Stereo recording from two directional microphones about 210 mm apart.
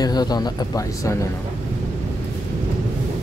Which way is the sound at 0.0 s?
20° left (ahead or behind).